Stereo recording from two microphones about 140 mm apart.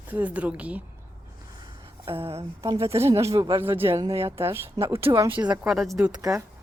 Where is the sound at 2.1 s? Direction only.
45° right (ahead or behind).